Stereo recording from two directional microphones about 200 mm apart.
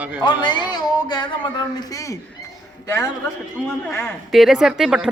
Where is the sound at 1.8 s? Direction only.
15° left (ahead or behind).